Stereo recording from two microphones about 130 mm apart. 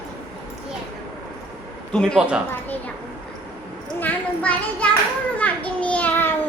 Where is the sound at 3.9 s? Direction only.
10° left (ahead or behind).